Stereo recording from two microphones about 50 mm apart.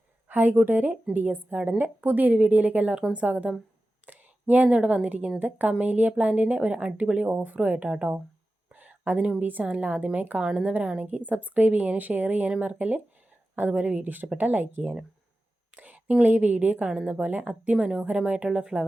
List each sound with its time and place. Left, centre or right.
0.3 s a woman's voice: right
8.7 s a sound: right
9.4 s a woman's voice: right; by 18.9 s centre